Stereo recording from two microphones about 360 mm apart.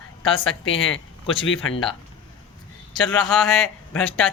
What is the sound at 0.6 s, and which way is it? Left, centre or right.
Speech, left.